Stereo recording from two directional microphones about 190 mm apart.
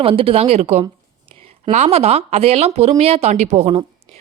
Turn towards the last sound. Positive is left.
turn(degrees=-35)  # may be behind; listen again after turning